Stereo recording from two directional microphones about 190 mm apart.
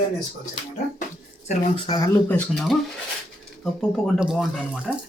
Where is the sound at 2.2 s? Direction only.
10° left (ahead or behind).